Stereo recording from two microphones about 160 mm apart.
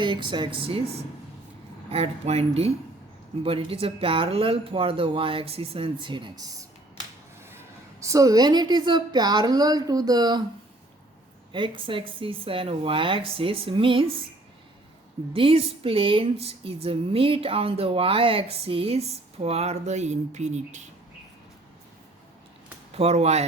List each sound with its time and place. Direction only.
0.0 s speech: 30° right (ahead or behind)
8.0 s a woman's voice: 20° right (ahead or behind)
11.5 s speech: 30° right (ahead or behind)
15.3 s speech: 35° right (ahead or behind)
22.9 s speech: 40° right (ahead or behind)